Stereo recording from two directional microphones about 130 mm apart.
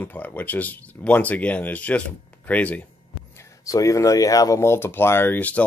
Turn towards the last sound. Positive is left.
turn(degrees=15)  # may be behind; listen again after turning